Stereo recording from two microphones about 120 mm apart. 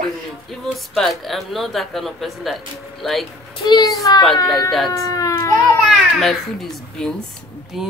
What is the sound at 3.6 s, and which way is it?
A child's voice, 35° left (ahead or behind).